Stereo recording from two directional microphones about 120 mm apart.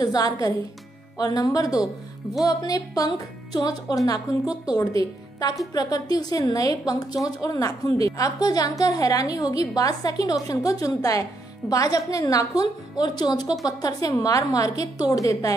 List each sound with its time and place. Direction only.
0.0 s a woman's voice: 35° left (ahead or behind)